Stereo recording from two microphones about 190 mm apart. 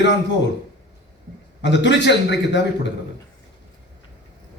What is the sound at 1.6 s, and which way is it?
A man's voice, 65° left (ahead or behind).